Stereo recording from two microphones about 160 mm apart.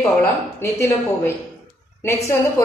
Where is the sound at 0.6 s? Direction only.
15° left (ahead or behind).